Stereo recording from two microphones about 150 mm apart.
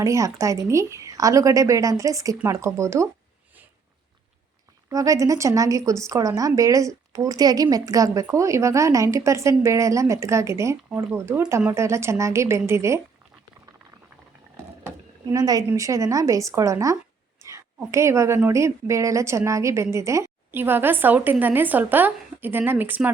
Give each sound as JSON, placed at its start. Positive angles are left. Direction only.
{"t": 0.0, "sound": "a woman's voice", "side_deg": -20}
{"t": 4.9, "sound": "a woman's voice", "side_deg": -20}
{"t": 14.8, "sound": "speech", "side_deg": -25}
{"t": 17.4, "sound": "a sound", "side_deg": -20}
{"t": 18.4, "sound": "a woman's voice", "side_deg": -20}